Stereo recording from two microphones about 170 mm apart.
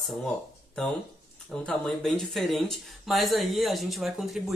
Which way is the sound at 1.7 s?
5° left (ahead or behind).